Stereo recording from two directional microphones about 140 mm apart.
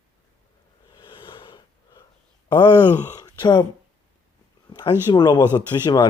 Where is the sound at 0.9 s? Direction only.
35° left (ahead or behind).